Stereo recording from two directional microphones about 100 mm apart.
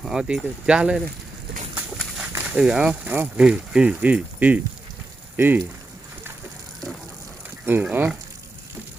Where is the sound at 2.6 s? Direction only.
10° right (ahead or behind).